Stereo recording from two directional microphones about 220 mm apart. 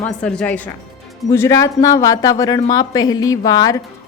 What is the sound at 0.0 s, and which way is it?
A woman's voice, 5° left (ahead or behind).